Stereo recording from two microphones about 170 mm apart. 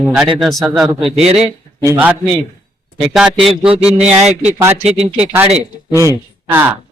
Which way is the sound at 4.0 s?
40° right (ahead or behind).